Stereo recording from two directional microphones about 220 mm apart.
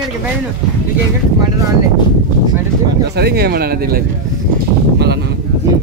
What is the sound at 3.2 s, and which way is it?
Speech, 45° right (ahead or behind).